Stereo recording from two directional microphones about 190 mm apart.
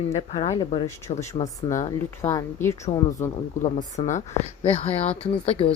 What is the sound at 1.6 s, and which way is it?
Speech, 15° left (ahead or behind).